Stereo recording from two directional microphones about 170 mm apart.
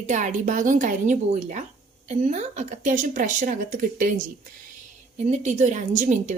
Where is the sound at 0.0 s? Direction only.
45° right (ahead or behind).